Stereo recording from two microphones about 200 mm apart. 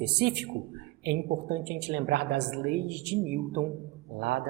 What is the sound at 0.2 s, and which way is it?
Speech, 55° right (ahead or behind).